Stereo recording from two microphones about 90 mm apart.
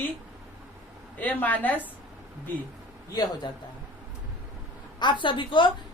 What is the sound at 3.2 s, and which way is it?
Speech, 50° left (ahead or behind).